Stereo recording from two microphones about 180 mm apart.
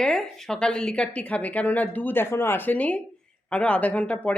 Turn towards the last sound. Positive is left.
turn(degrees=5)  # may be behind; listen again after turning